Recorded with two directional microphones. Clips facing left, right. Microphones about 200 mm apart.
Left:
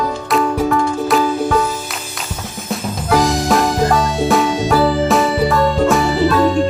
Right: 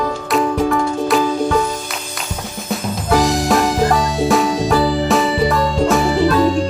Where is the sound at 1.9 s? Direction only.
Centre (ahead or behind).